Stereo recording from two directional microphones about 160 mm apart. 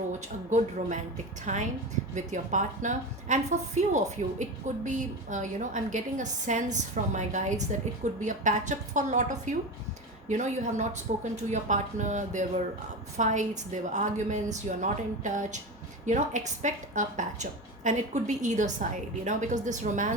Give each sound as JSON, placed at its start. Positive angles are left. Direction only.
{"t": 0.5, "sound": "a woman's voice", "side_deg": -50}